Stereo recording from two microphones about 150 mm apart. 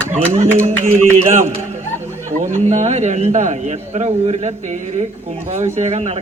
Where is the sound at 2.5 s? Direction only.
50° right (ahead or behind).